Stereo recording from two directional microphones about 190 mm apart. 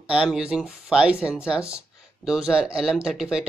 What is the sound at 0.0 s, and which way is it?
Speech, 5° right (ahead or behind).